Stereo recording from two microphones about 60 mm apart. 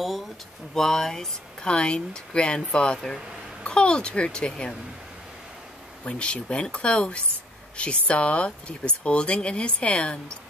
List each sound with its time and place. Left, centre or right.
0.7 s speech: centre
6.0 s speech: centre